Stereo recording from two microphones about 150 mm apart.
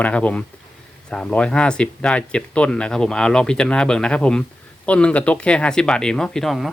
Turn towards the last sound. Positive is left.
turn(degrees=0)  # may be behind; listen again after turning